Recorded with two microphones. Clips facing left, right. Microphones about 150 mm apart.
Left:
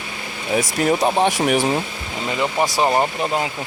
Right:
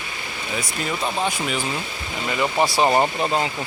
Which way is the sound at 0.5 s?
60° left (ahead or behind).